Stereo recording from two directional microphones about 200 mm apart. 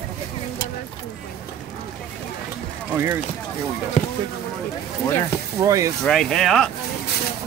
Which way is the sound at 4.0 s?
35° left (ahead or behind).